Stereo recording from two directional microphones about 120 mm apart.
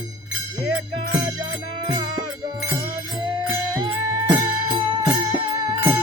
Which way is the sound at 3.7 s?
40° right (ahead or behind).